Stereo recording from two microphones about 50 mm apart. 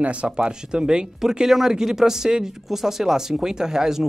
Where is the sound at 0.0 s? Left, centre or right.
Right.